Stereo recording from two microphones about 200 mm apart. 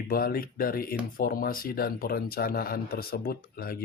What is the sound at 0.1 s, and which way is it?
Speech, 45° left (ahead or behind).